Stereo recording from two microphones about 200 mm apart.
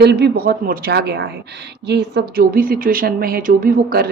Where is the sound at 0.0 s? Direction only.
55° right (ahead or behind).